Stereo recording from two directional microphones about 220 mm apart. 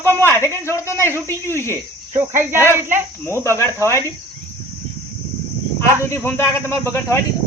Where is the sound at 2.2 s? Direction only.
10° right (ahead or behind).